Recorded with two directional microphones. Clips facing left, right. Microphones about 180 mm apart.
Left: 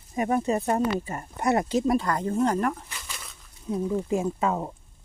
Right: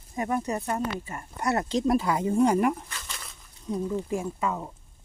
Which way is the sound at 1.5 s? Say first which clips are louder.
Left 3 dB; 15° left (ahead or behind).